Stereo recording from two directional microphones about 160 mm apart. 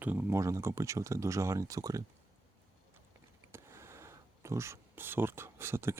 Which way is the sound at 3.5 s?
15° right (ahead or behind).